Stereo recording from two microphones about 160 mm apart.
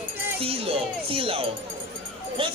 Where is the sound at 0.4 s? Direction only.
35° right (ahead or behind).